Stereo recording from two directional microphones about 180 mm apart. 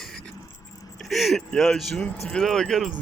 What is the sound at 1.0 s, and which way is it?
Speech, centre (ahead or behind).